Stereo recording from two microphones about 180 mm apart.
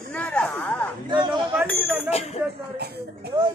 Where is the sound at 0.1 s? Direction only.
5° left (ahead or behind).